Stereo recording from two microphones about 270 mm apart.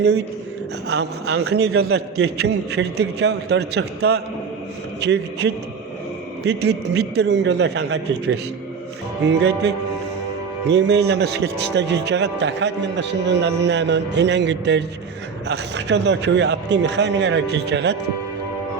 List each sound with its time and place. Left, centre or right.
0.9 s speech: right
1.6 s a man's voice: right
1.9 s speech: right
9.2 s speech: right
10.7 s speech: right